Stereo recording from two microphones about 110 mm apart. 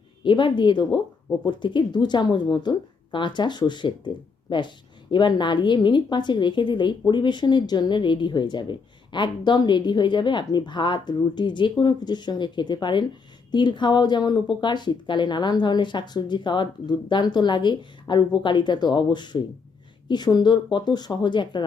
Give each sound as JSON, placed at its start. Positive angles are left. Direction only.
{"t": 0.2, "sound": "a woman's voice", "side_deg": 45}